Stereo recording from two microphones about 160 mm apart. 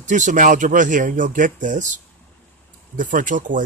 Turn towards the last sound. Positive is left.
turn(degrees=-55)  # may be behind; listen again after turning